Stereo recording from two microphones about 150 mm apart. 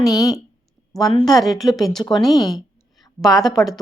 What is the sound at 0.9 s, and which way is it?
A woman's voice, centre (ahead or behind).